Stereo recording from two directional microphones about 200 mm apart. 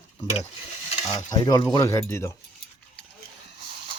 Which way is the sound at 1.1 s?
20° left (ahead or behind).